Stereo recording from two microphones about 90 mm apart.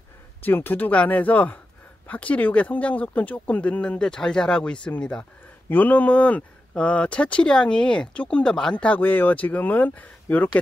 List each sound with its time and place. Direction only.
0.4 s speech: 20° left (ahead or behind)